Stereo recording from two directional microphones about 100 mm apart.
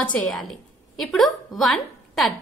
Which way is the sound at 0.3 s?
5° left (ahead or behind).